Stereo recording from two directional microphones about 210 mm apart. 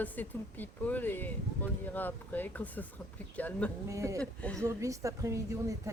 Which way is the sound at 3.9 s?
15° right (ahead or behind).